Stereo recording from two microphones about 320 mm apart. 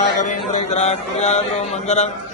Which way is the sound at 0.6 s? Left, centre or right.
Left.